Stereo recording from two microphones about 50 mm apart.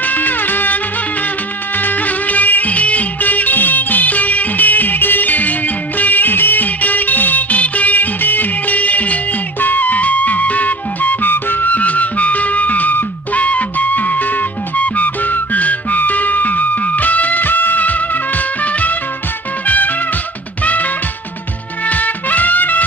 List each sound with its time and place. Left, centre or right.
0.0 s music: left
1.8 s music: left